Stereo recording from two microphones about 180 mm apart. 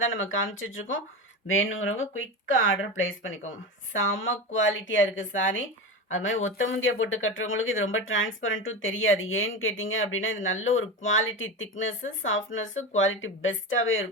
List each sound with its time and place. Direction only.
0.0 s speech: 90° left